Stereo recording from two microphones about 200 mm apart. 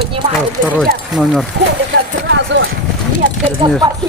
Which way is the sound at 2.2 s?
65° right (ahead or behind).